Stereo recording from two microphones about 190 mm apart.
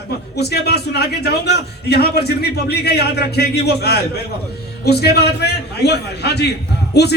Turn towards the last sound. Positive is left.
turn(degrees=60)  # may be behind; listen again after turning